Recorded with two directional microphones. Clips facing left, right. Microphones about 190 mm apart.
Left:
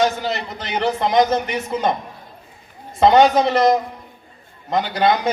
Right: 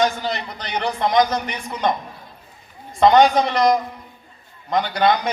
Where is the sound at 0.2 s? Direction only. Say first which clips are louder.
Left 2 dB; 5° left (ahead or behind).